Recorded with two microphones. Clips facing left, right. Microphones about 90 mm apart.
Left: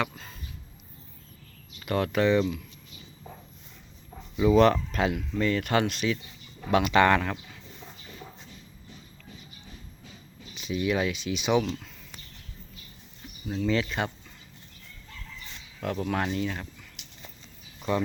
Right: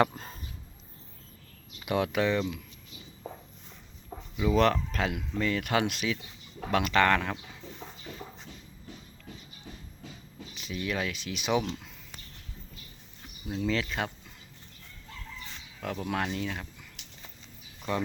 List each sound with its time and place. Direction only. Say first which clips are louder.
0.0 s a sound: right 5 dB; 40° right (ahead or behind)
1.8 s speech: left 2 dB; 10° right (ahead or behind)
4.4 s speech: left 5 dB; 5° left (ahead or behind)
10.5 s speech: left 6 dB; centre (ahead or behind)
13.5 s speech: left 3 dB; centre (ahead or behind)
15.8 s speech: left 3 dB; centre (ahead or behind)
17.9 s speech: left 4 dB; centre (ahead or behind)